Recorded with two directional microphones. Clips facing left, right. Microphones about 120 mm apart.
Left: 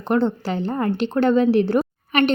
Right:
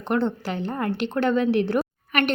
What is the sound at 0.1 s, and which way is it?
A woman's voice, 30° left (ahead or behind).